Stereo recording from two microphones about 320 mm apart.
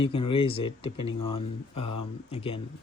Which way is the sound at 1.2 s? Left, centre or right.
Left.